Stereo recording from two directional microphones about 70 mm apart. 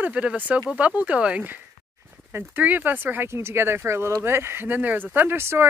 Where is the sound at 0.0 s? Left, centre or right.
Centre.